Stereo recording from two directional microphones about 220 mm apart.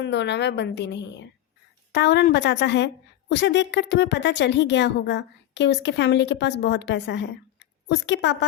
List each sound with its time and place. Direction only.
0.0 s a woman's voice: 50° left (ahead or behind)